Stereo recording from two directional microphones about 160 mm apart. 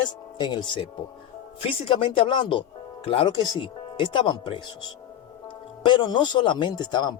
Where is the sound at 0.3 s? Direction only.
25° left (ahead or behind).